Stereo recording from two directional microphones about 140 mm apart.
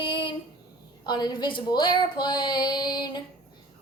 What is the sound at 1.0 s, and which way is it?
Speech, 30° left (ahead or behind).